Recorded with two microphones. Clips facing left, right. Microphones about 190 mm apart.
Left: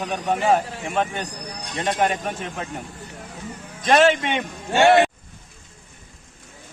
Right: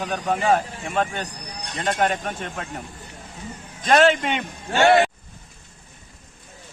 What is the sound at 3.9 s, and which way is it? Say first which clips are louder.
Speech: even; centre (ahead or behind).